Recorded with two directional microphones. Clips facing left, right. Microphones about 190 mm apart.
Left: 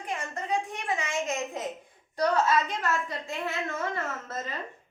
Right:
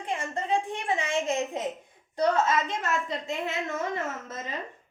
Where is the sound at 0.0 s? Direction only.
25° right (ahead or behind).